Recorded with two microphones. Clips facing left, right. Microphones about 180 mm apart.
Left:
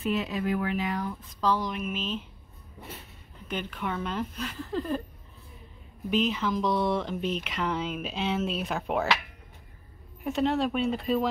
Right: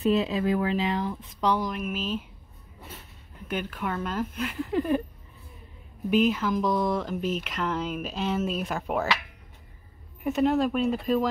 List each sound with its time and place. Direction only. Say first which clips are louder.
0.0 s speech: right 5 dB; 30° right (ahead or behind)
1.6 s speech: right 2 dB; centre (ahead or behind)
3.4 s speech: right 2 dB; 5° right (ahead or behind)
4.6 s a sound: right 5 dB; 15° right (ahead or behind)
6.0 s speech: right 4 dB; 5° right (ahead or behind)
10.2 s speech: right 3 dB; centre (ahead or behind)